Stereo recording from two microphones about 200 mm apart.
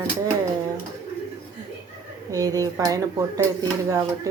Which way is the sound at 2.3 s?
20° right (ahead or behind).